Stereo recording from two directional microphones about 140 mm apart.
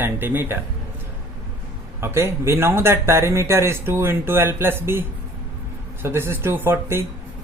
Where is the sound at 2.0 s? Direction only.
20° right (ahead or behind).